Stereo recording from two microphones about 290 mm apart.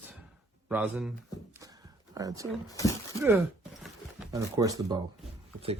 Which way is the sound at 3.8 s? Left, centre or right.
Centre.